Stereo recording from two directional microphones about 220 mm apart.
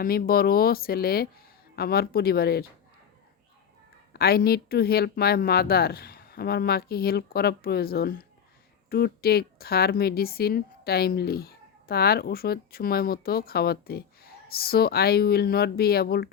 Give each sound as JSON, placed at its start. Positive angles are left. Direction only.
{"t": 0.0, "sound": "a woman's voice", "side_deg": 40}
{"t": 4.1, "sound": "a woman's voice", "side_deg": 45}